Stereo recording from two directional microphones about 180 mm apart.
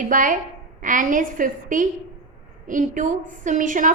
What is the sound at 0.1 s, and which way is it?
A woman's voice, 45° right (ahead or behind).